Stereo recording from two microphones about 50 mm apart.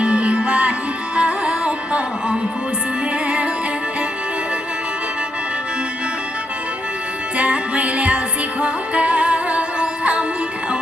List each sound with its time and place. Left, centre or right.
0.0 s music: right
7.3 s music: right